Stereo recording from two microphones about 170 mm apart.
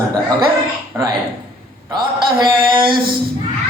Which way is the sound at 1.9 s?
25° right (ahead or behind).